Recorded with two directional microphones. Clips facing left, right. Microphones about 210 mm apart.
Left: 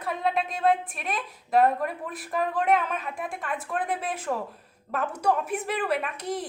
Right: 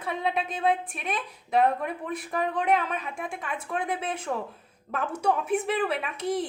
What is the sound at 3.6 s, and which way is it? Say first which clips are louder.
A woman's voice: right 1 dB; 5° left (ahead or behind).